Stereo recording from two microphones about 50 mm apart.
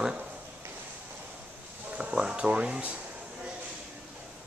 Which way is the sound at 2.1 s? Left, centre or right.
Centre.